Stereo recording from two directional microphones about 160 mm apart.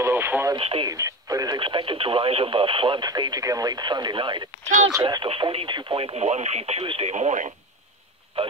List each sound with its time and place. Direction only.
0.0 s radio: 15° right (ahead or behind)
0.6 s speech: 35° right (ahead or behind)
0.8 s speech: 20° right (ahead or behind); by 8.5 s 40° right (ahead or behind)